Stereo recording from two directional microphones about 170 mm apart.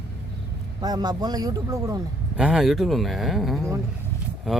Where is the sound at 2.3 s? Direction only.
5° right (ahead or behind).